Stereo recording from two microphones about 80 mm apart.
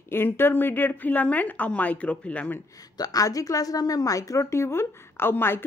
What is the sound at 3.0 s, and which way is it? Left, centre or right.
A woman's voice, left.